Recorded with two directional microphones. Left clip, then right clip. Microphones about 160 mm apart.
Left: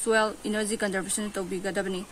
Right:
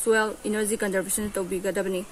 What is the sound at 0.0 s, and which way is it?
Speech, 25° left (ahead or behind).